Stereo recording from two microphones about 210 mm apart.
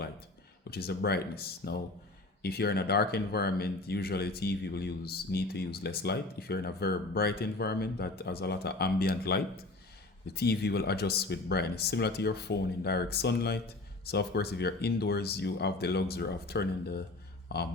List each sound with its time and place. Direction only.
0.7 s speech: 50° left (ahead or behind)